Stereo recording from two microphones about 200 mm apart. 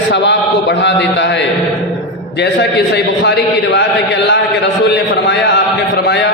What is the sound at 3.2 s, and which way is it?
Speech, 60° left (ahead or behind).